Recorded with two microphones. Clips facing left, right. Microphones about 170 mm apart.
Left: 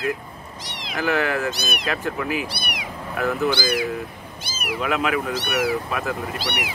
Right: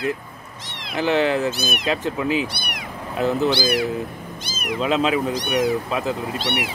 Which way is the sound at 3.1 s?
20° right (ahead or behind).